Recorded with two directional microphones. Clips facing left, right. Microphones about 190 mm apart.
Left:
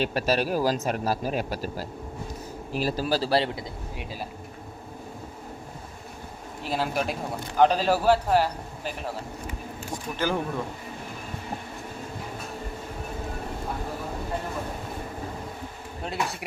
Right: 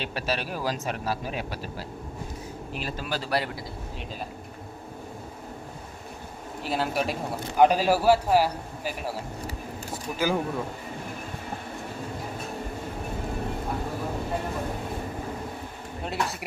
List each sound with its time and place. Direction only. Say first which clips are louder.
0.0 s speech: left 6 dB; 40° left (ahead or behind); by 3.6 s 25° left (ahead or behind)
6.6 s speech: even; centre (ahead or behind)
10.2 s speech: right 1 dB; 10° right (ahead or behind)